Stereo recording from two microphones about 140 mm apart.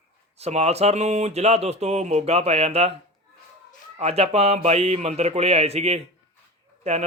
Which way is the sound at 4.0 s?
45° right (ahead or behind).